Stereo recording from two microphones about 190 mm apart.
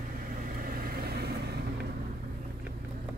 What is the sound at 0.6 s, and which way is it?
Vehicle, 50° right (ahead or behind).